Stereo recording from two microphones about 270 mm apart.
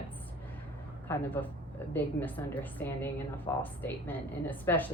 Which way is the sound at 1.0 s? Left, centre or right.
Centre.